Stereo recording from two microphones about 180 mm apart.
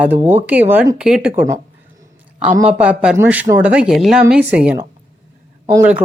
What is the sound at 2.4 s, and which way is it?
A woman's voice, 5° right (ahead or behind).